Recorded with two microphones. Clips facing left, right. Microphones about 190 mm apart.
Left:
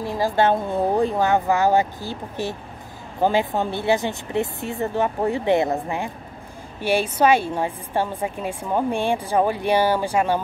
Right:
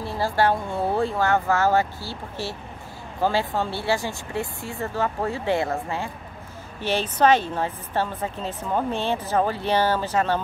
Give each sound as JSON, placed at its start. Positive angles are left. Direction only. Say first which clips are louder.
{"t": 0.0, "sound": "a woman's voice", "louder": "left 3 dB", "side_deg": 15}